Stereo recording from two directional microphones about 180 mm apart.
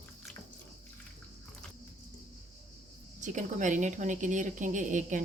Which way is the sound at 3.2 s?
45° right (ahead or behind).